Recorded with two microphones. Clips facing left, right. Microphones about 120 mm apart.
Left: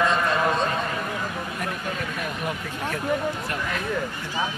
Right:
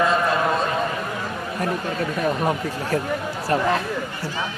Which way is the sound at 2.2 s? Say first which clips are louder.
Right 8 dB; 35° right (ahead or behind).